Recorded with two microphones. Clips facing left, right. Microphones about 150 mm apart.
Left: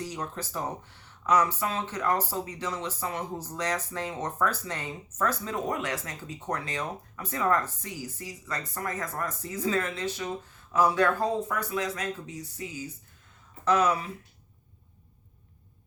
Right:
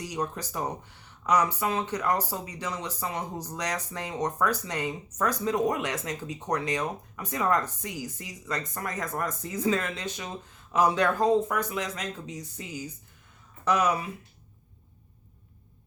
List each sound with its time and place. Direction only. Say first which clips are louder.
0.0 s speech: right 3 dB; 15° right (ahead or behind)